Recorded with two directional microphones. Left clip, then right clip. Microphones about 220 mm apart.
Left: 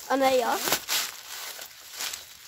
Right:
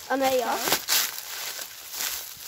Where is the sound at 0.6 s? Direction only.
5° left (ahead or behind).